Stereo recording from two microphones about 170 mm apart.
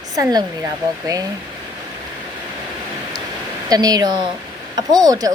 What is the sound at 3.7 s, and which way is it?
Speech, 20° right (ahead or behind).